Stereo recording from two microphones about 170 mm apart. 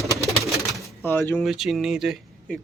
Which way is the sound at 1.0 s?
15° left (ahead or behind).